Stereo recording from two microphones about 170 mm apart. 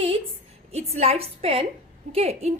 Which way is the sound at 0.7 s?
40° right (ahead or behind).